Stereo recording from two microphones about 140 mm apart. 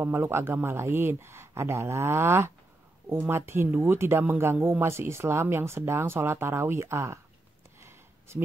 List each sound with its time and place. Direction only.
0.0 s speech: 15° right (ahead or behind)